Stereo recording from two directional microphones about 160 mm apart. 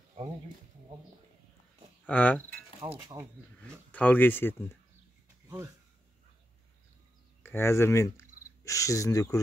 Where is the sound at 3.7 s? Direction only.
10° left (ahead or behind).